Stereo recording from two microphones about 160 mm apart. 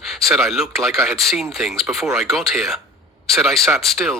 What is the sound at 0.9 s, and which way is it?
Speech, 15° right (ahead or behind).